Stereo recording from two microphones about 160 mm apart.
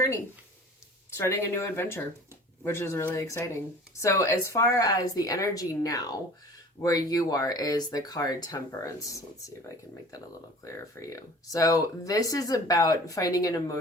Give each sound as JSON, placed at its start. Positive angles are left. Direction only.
{"t": 1.1, "sound": "speech", "side_deg": 15}
{"t": 10.6, "sound": "speech", "side_deg": 20}